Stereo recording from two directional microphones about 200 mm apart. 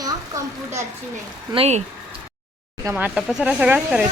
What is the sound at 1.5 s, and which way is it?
Speech, 30° right (ahead or behind).